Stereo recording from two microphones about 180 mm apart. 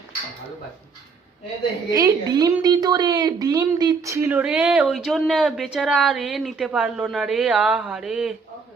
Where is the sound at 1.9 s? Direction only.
20° right (ahead or behind); by 8.3 s 5° right (ahead or behind).